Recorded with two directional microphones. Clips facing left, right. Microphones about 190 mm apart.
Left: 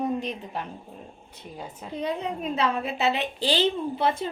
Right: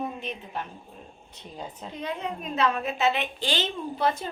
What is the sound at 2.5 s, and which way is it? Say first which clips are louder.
A woman's voice: right 2 dB; 30° left (ahead or behind).